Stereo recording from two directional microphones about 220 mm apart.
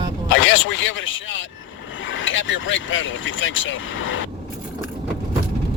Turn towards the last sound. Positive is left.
turn(degrees=60)  # may be behind; listen again after turning